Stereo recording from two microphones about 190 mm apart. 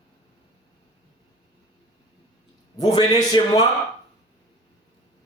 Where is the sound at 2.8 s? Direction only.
20° left (ahead or behind).